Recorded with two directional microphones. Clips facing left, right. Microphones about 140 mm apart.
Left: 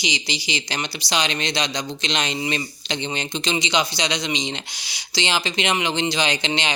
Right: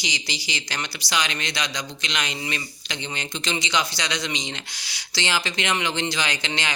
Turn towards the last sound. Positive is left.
turn(degrees=20)  # may be behind; listen again after turning